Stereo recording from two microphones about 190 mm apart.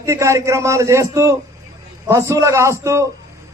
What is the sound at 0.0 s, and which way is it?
A man's voice, 15° right (ahead or behind).